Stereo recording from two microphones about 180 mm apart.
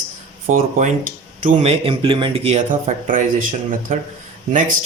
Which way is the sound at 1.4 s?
35° right (ahead or behind).